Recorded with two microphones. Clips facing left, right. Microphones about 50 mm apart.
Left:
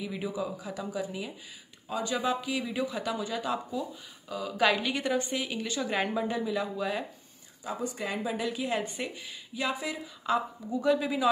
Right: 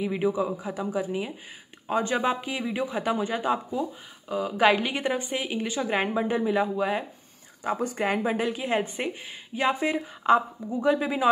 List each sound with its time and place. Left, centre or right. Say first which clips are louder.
0.0 s a woman's voice: right 8 dB; right
7.6 s speech: right 7 dB; right
10.8 s a woman's voice: right 3 dB; right